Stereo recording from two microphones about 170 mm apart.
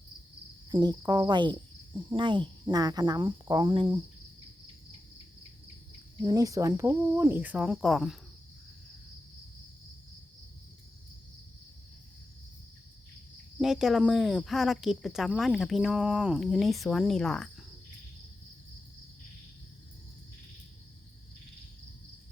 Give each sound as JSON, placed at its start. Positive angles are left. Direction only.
{"t": 0.7, "sound": "speech", "side_deg": -25}
{"t": 6.2, "sound": "speech", "side_deg": -20}
{"t": 13.6, "sound": "speech", "side_deg": -5}